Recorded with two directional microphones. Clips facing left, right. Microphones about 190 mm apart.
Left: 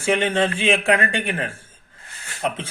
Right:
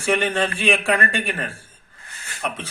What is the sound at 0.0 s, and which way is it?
A man's voice, 25° left (ahead or behind).